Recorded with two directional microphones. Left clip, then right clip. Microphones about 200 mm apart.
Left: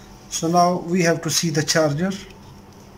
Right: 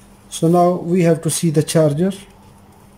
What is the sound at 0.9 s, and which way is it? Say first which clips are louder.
Speech: right 4 dB; 15° right (ahead or behind).